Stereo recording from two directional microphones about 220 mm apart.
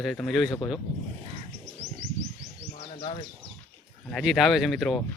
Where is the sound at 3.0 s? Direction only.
20° left (ahead or behind).